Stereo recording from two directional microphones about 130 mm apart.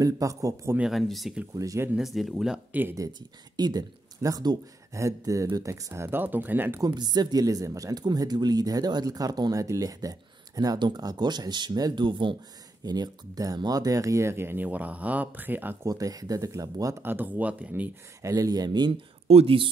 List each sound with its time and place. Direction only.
0.0 s speech: 25° right (ahead or behind)
0.7 s speech: centre (ahead or behind)
1.5 s speech: 25° right (ahead or behind)
2.0 s speech: centre (ahead or behind)
3.0 s speech: 35° right (ahead or behind); by 6.8 s 15° right (ahead or behind)
6.8 s speech: 30° right (ahead or behind); by 15.9 s 15° right (ahead or behind)
15.9 s speech: 30° right (ahead or behind); by 17.9 s 10° right (ahead or behind)
18.2 s speech: 25° right (ahead or behind)
19.2 s speech: 50° right (ahead or behind)